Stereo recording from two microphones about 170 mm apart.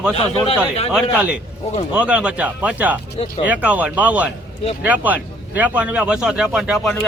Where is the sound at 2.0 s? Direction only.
5° right (ahead or behind).